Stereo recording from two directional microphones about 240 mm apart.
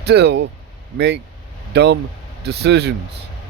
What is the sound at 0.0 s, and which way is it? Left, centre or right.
Speech, right.